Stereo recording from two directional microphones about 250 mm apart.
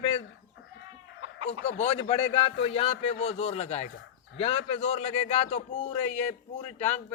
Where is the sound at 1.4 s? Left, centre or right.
Left.